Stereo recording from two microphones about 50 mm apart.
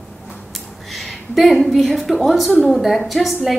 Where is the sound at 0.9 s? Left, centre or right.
Centre.